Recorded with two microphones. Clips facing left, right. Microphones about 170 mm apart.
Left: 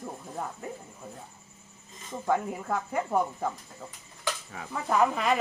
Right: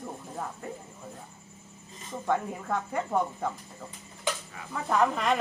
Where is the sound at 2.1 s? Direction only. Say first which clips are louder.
Left 1 dB; 5° left (ahead or behind).